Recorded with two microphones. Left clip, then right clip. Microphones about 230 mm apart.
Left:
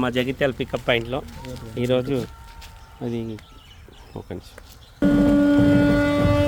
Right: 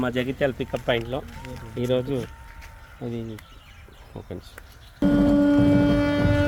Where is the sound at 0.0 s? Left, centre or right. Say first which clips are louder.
Left 2 dB; centre.